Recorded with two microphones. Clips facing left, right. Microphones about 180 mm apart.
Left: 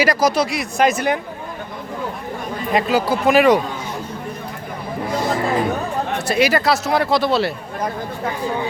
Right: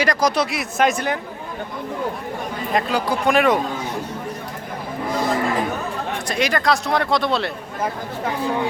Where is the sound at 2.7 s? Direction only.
5° left (ahead or behind).